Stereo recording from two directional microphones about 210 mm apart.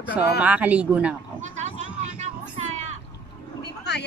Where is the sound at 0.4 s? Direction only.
5° right (ahead or behind).